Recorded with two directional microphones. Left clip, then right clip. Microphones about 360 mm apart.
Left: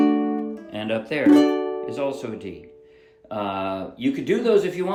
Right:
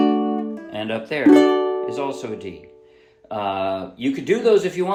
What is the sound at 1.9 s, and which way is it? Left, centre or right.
Speech, centre.